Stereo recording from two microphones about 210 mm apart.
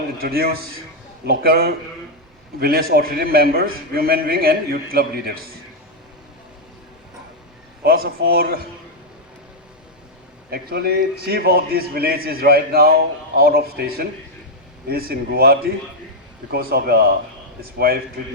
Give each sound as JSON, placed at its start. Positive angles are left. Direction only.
{"t": 0.2, "sound": "a man's voice", "side_deg": -45}
{"t": 7.9, "sound": "a man's voice", "side_deg": -45}
{"t": 10.5, "sound": "a man's voice", "side_deg": -45}